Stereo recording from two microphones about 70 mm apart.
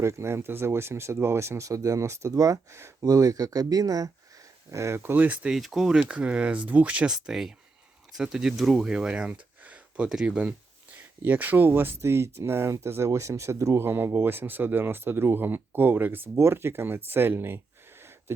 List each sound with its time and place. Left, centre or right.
0.0 s speech: right
3.0 s speech: right
4.7 s speech: right
5.1 s speech: right
5.5 s speech: centre
7.1 s speech: centre
10.9 s speech: right